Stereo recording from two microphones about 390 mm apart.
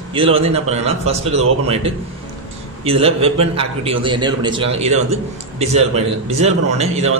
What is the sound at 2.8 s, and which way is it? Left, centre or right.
A man's voice, centre.